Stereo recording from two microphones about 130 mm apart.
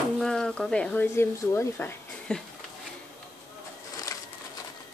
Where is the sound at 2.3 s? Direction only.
5° left (ahead or behind).